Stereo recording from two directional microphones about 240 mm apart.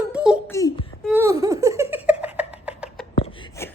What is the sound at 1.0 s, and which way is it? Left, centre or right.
Giggle, centre.